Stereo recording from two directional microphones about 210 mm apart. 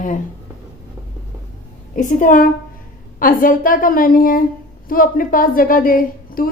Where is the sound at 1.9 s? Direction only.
40° left (ahead or behind).